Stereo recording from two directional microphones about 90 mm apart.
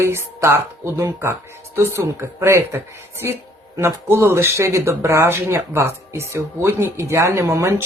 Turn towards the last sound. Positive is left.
turn(degrees=-30)  # may be behind; listen again after turning